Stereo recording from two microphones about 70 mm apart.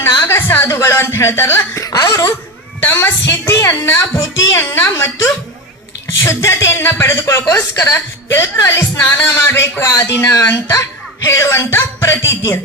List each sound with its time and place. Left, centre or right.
0.0 s a sound: left
0.7 s speech: left
1.8 s speech: left
2.8 s speech: left
3.5 s speech: left
4.7 s speech: left
6.2 s speech: left
9.0 s music: left
9.2 s speech: left